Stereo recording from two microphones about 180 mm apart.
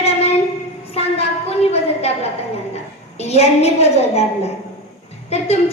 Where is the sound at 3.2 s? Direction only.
35° left (ahead or behind).